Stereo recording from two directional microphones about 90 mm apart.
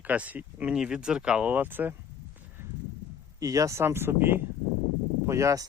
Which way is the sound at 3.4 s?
40° right (ahead or behind).